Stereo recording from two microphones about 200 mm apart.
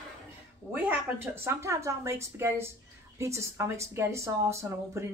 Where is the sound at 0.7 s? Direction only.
10° right (ahead or behind).